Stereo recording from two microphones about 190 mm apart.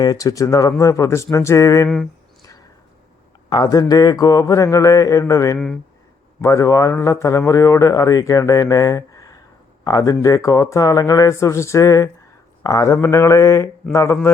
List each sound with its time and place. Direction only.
0.0 s speech: 20° left (ahead or behind)
3.5 s speech: 20° left (ahead or behind)
5.5 s speech: 5° left (ahead or behind)
6.4 s speech: 15° left (ahead or behind)